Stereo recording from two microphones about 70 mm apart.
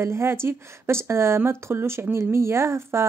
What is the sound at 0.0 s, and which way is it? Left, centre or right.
Speech, right.